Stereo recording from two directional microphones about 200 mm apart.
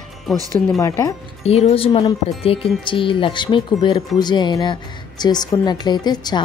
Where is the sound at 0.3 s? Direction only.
Centre (ahead or behind).